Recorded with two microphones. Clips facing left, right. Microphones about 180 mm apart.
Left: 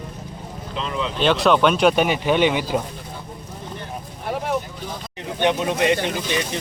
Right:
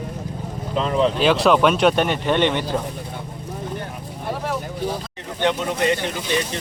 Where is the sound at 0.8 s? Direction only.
45° right (ahead or behind).